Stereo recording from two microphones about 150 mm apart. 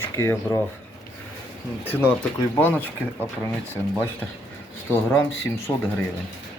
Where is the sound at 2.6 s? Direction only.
10° left (ahead or behind).